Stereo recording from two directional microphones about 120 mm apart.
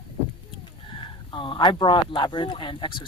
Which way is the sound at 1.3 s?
45° left (ahead or behind).